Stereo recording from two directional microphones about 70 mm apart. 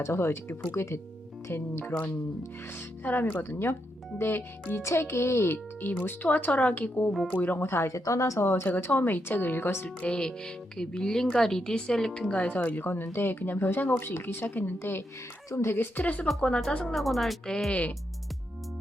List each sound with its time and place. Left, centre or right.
0.0 s speech: left
1.8 s speech: left
5.9 s speech: left
10.0 s speech: centre; by 15.0 s left
15.4 s speech: left
15.7 s speech: left
16.9 s speech: centre